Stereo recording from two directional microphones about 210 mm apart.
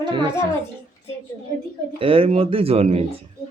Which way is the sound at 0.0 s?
20° right (ahead or behind).